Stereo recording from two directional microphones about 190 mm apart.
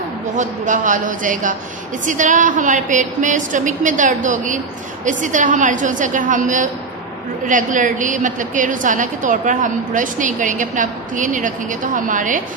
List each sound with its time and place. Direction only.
0.4 s a woman's voice: 40° right (ahead or behind)